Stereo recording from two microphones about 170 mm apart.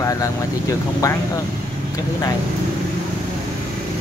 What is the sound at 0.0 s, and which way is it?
Speech, 20° left (ahead or behind).